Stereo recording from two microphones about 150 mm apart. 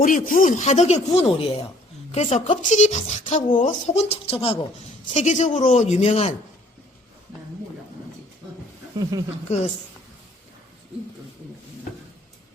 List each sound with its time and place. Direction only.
0.0 s speech: 60° left (ahead or behind); by 4.5 s 40° left (ahead or behind)
5.1 s speech: 50° left (ahead or behind)
9.0 s speech: 25° right (ahead or behind)